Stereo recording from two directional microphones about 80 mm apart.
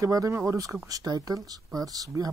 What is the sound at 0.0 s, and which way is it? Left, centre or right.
Speech, right.